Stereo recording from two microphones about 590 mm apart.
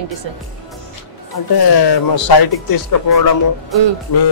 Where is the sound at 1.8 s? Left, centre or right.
Left.